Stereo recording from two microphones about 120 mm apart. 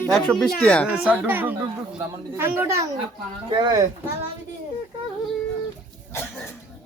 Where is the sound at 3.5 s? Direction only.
40° right (ahead or behind).